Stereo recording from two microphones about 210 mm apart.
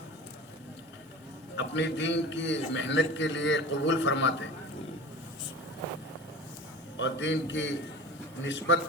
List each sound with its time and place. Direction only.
1.5 s a man's voice: 60° left (ahead or behind)
6.9 s a man's voice: 60° left (ahead or behind)